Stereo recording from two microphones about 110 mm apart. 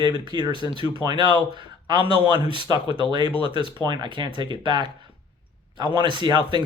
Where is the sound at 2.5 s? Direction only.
45° right (ahead or behind).